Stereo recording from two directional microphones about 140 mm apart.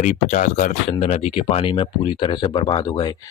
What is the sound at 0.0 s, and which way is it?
Speech, 60° left (ahead or behind).